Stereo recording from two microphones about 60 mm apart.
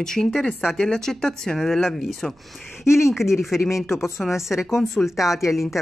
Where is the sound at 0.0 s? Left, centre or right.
Centre.